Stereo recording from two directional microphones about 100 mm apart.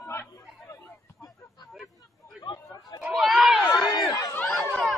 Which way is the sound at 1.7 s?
Centre (ahead or behind).